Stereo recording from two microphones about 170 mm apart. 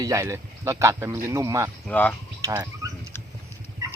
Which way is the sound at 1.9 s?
10° left (ahead or behind).